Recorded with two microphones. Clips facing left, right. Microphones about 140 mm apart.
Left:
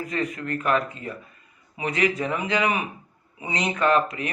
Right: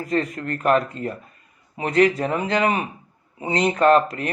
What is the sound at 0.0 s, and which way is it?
Speech, 40° right (ahead or behind).